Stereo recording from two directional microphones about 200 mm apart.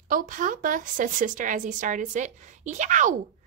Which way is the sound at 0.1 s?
40° right (ahead or behind).